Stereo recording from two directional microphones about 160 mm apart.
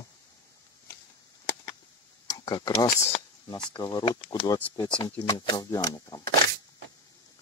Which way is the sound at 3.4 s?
25° left (ahead or behind).